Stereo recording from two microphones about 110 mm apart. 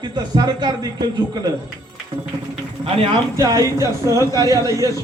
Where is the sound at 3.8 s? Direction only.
30° right (ahead or behind).